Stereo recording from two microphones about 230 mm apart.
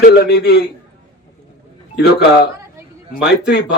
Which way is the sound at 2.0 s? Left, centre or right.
Left.